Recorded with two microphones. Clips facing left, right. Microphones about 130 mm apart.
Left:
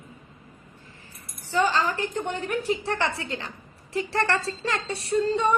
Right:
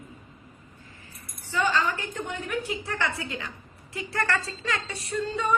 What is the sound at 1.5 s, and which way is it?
A woman's voice, 35° left (ahead or behind).